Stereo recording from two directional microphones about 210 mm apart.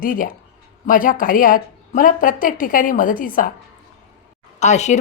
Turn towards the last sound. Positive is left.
turn(degrees=35)  # may be behind; listen again after turning